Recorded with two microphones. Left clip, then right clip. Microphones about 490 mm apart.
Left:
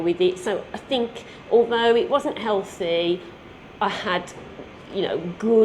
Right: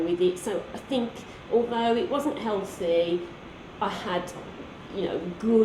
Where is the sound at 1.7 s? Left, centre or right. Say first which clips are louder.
Left 7 dB; left.